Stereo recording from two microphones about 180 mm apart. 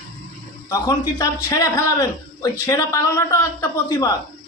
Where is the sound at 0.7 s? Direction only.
20° left (ahead or behind).